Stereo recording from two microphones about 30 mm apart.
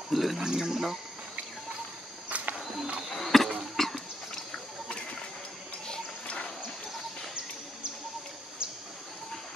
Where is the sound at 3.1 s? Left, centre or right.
Centre.